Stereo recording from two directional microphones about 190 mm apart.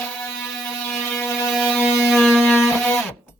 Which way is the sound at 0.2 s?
10° left (ahead or behind).